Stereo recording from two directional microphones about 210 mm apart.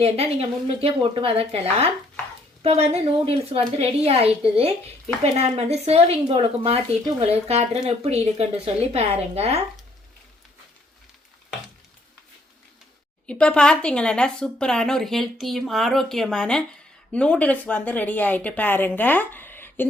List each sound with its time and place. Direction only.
0.0 s speech: 30° right (ahead or behind)
13.2 s a woman's voice: 5° left (ahead or behind)